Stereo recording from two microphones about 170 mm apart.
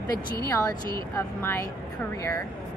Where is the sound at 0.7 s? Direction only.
15° left (ahead or behind).